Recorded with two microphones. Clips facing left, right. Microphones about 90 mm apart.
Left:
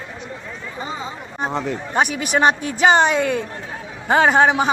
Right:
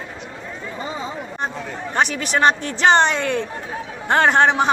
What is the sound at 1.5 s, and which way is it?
Speech, 80° left.